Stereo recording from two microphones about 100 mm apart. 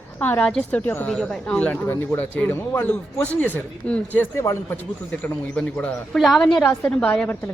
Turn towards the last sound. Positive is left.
turn(degrees=15)  # may be behind; listen again after turning